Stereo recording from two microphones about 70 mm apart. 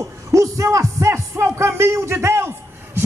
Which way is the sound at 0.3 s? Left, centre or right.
Right.